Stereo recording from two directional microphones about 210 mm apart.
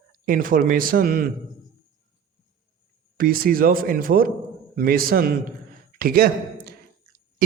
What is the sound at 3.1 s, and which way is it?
A man's voice, 45° right (ahead or behind).